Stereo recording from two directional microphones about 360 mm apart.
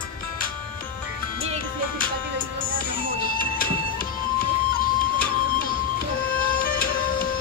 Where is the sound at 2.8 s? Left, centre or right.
Left.